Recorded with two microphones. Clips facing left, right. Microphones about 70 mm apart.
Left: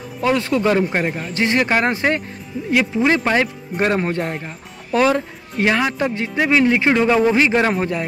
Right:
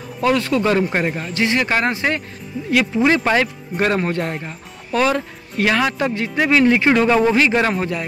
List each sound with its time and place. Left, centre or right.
0.2 s speech: centre
0.8 s a man's voice: centre
1.3 s speech: left
2.8 s speech: centre